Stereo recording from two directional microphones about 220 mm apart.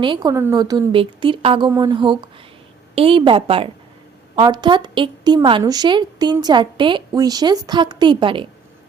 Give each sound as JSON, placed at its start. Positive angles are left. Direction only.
{"t": 0.0, "sound": "a woman's voice", "side_deg": -20}